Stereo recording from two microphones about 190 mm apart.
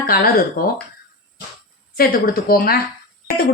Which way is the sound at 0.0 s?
50° left (ahead or behind).